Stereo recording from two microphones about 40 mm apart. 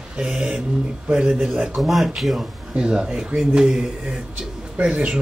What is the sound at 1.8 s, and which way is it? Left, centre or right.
Speech, centre.